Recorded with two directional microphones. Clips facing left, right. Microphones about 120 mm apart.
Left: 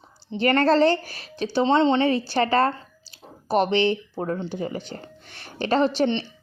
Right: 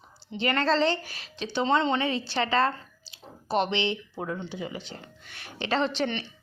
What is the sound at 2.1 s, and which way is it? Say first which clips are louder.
A woman's voice: left 6 dB; 45° left (ahead or behind).